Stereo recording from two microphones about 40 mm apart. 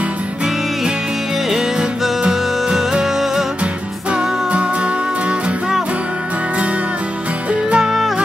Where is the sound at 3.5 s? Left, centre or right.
Right.